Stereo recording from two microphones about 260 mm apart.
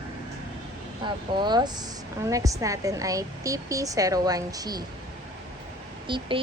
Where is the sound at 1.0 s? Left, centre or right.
Centre.